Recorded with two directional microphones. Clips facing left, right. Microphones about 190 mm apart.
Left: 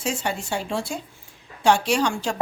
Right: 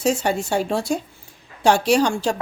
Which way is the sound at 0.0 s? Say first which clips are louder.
Right 7 dB; 40° right (ahead or behind).